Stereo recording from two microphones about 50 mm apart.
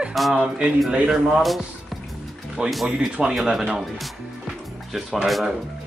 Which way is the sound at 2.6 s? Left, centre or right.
Centre.